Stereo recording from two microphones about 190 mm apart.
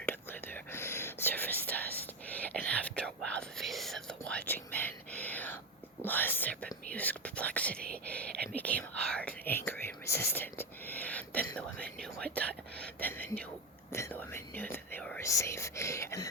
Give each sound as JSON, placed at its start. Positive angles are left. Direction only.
{"t": 0.0, "sound": "whispering", "side_deg": 10}